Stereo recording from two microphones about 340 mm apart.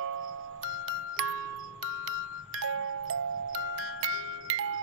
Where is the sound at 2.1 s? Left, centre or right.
Right.